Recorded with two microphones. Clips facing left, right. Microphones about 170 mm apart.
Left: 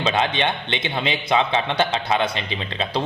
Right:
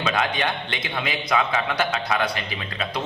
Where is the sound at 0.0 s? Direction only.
25° left (ahead or behind).